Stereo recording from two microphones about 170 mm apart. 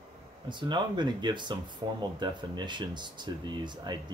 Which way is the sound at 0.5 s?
25° right (ahead or behind).